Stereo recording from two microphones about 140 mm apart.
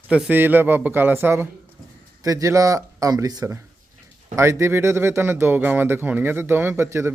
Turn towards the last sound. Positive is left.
turn(degrees=-20)  # may be behind; listen again after turning